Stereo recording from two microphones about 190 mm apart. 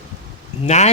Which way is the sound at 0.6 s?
35° left (ahead or behind).